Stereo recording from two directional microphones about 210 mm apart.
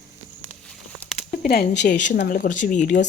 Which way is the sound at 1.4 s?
45° left (ahead or behind).